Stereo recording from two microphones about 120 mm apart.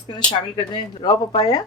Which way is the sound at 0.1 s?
40° left (ahead or behind).